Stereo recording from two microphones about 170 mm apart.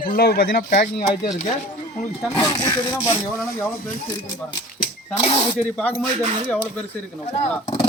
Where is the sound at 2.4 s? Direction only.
20° left (ahead or behind).